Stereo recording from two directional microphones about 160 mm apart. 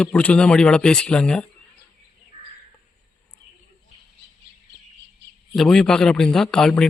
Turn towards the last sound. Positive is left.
turn(degrees=5)  # may be behind; listen again after turning